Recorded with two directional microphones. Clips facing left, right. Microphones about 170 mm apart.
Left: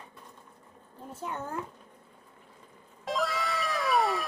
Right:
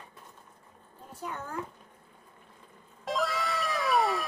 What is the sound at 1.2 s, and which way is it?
Speech, 20° left (ahead or behind).